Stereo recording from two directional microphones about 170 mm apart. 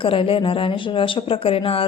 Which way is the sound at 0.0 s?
30° left (ahead or behind).